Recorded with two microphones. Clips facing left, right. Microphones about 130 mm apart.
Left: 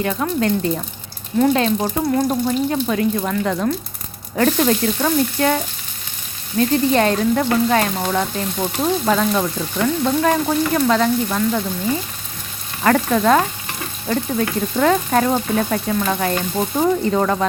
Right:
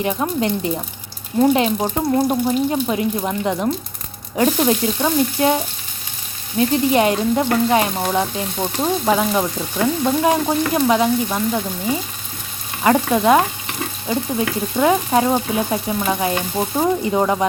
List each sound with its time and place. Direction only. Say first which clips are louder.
0.0 s frying: even; 20° right (ahead or behind)
6.6 s speech: even; 20° right (ahead or behind)